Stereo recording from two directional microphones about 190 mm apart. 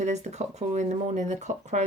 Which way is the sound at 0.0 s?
40° right (ahead or behind).